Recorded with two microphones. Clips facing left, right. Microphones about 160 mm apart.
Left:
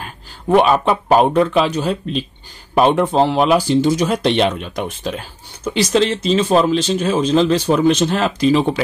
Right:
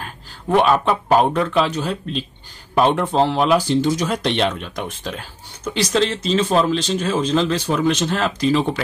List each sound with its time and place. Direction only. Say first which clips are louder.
0.5 s speech: left 3 dB; 15° left (ahead or behind)